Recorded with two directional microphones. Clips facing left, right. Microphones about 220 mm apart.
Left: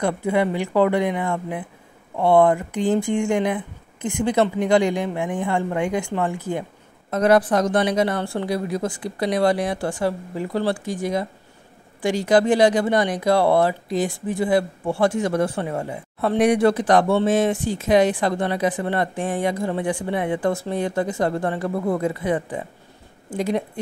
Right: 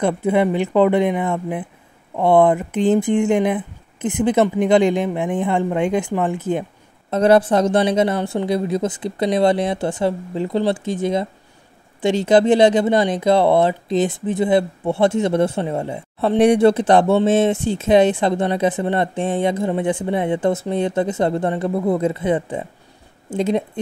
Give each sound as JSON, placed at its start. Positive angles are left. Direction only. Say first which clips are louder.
{"t": 0.0, "sound": "speech", "louder": "right 4 dB", "side_deg": -20}